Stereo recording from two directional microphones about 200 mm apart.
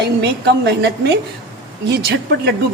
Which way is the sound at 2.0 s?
55° right (ahead or behind).